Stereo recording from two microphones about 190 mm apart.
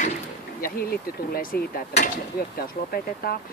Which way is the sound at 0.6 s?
55° left (ahead or behind).